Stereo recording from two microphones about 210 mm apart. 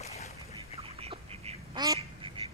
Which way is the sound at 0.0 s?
30° left (ahead or behind).